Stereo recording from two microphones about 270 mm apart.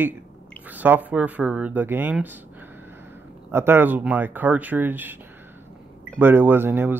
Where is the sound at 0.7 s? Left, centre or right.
Centre.